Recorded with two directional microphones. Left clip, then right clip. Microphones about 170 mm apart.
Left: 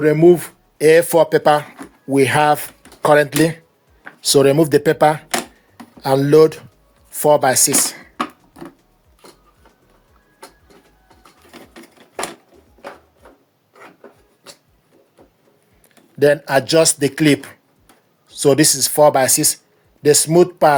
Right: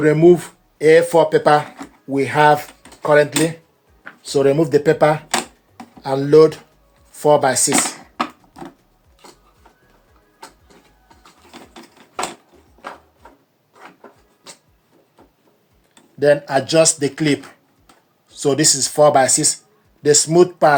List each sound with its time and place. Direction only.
0.0 s speech: 40° left (ahead or behind); by 3.6 s 60° left (ahead or behind)
4.2 s speech: 90° left; by 7.7 s 45° left (ahead or behind)
8.1 s a sound: 5° left (ahead or behind)
16.1 s speech: 50° left (ahead or behind); by 20.7 s 35° left (ahead or behind)